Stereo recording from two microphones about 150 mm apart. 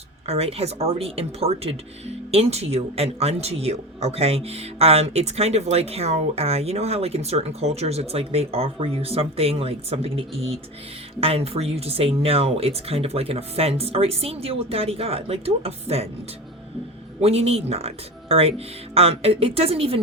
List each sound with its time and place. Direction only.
0.3 s speech: 40° right (ahead or behind)
17.2 s speech: 45° right (ahead or behind)